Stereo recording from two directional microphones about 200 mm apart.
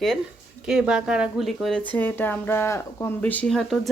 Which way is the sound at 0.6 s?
5° right (ahead or behind).